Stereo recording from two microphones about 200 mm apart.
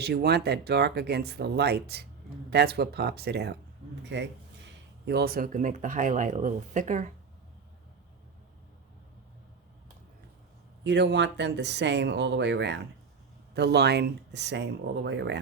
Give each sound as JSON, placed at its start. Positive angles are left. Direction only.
{"t": 0.0, "sound": "speech", "side_deg": -55}
{"t": 10.8, "sound": "speech", "side_deg": -60}